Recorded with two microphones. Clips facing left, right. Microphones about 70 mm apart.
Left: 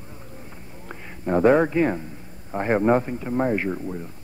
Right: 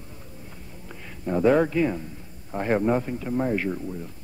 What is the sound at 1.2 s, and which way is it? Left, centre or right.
Speech, left.